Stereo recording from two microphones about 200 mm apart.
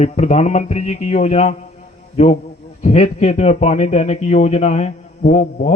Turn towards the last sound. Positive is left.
turn(degrees=40)  # may be behind; listen again after turning